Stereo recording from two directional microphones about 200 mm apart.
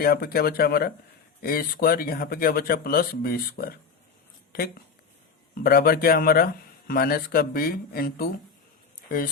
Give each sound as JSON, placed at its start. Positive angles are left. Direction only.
{"t": 0.0, "sound": "speech", "side_deg": 50}
{"t": 5.6, "sound": "speech", "side_deg": 50}